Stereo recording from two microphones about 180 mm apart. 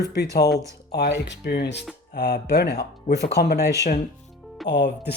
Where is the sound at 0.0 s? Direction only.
65° left (ahead or behind).